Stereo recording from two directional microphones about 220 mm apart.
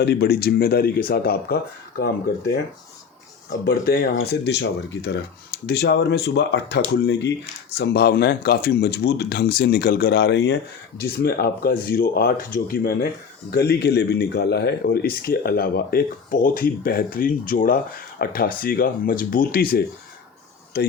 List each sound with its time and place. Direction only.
0.0 s a man's voice: 45° left (ahead or behind)
3.6 s a man's voice: 45° left (ahead or behind)